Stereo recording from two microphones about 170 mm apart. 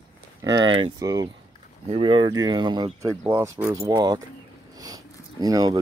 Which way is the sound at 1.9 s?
30° right (ahead or behind).